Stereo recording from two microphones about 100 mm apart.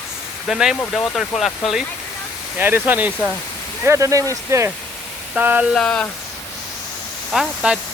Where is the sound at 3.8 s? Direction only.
30° right (ahead or behind).